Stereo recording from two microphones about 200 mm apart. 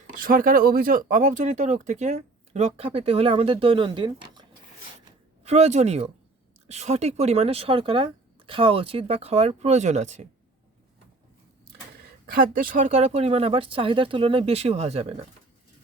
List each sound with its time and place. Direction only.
0.2 s speech: 45° right (ahead or behind)
12.5 s speech: 45° right (ahead or behind)